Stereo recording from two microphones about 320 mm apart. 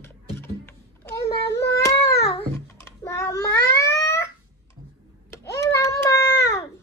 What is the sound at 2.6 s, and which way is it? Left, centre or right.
Cat, centre.